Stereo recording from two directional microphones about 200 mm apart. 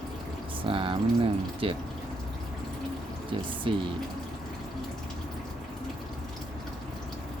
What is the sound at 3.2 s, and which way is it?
Speech, 25° right (ahead or behind).